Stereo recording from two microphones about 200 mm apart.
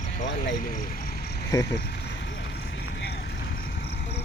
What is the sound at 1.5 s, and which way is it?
Speech, 15° left (ahead or behind).